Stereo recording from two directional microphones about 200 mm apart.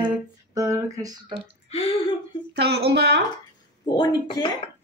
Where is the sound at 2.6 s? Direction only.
55° right (ahead or behind).